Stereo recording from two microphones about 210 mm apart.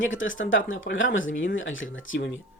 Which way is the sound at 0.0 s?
65° left (ahead or behind).